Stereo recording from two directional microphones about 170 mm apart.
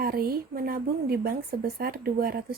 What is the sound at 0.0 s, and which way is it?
Speech, 60° right (ahead or behind).